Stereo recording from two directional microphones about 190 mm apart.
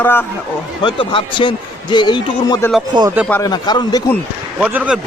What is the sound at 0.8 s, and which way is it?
A man's voice, 25° left (ahead or behind).